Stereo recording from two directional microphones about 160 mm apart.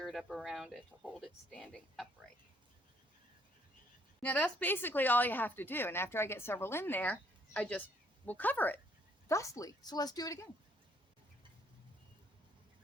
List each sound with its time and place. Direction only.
0.0 s speech: centre (ahead or behind)
4.2 s speech: 10° left (ahead or behind)